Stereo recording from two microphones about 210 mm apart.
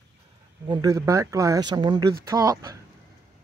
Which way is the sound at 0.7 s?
15° right (ahead or behind).